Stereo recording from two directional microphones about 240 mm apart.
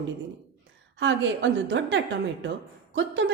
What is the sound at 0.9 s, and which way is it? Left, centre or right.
A woman's voice, right.